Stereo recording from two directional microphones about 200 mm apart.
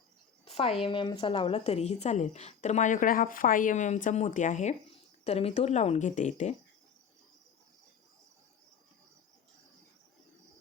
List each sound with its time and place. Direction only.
0.4 s a woman's voice: 30° left (ahead or behind)